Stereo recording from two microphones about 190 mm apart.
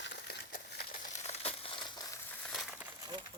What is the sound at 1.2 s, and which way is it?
Crumpling, 30° left (ahead or behind).